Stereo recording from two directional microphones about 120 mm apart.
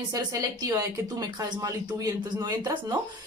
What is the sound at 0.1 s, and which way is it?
Speech, 30° right (ahead or behind).